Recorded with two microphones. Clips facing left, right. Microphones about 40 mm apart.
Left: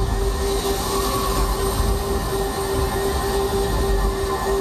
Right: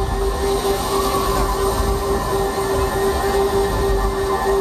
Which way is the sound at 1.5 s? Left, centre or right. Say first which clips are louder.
Right 4 dB; centre.